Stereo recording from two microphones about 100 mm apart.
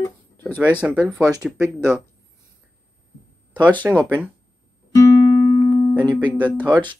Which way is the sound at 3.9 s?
20° right (ahead or behind).